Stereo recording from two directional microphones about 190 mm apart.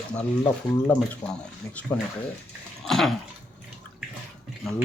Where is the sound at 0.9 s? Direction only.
5° left (ahead or behind).